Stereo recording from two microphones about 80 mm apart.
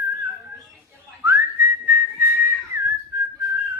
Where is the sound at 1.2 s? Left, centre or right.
Right.